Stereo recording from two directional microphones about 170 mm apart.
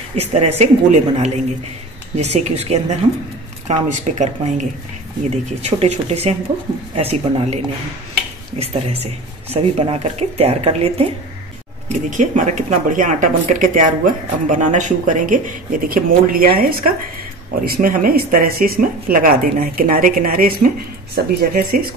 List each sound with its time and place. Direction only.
0.1 s speech: 40° right (ahead or behind)
12.1 s speech: 45° right (ahead or behind)